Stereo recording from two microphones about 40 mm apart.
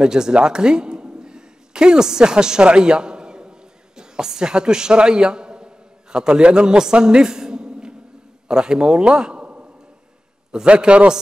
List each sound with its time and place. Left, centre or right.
0.0 s a man's voice: centre
0.4 s a sound: centre
6.1 s a man's voice: right